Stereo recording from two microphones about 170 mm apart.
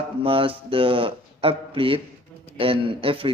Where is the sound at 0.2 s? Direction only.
30° right (ahead or behind).